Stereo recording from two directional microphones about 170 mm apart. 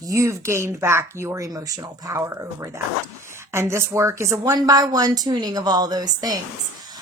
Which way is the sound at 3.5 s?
15° right (ahead or behind).